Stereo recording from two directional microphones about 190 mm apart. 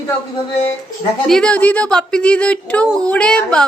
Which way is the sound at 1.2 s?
5° left (ahead or behind).